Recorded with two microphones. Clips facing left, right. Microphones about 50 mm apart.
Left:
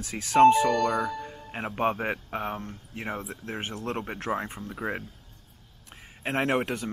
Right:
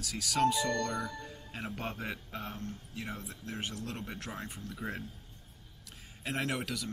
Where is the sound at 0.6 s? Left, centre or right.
Left.